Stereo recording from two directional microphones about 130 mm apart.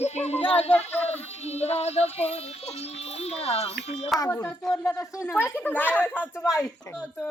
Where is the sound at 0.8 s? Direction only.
55° left (ahead or behind).